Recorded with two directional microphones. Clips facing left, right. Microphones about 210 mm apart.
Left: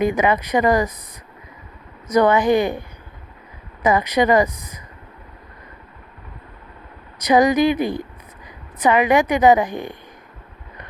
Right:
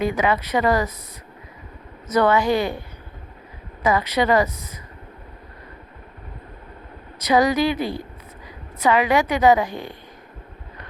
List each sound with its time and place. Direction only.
0.1 s a woman's voice: 15° left (ahead or behind)
2.0 s a woman's voice: 15° left (ahead or behind)
3.8 s a woman's voice: 15° left (ahead or behind)
7.2 s a woman's voice: 15° left (ahead or behind)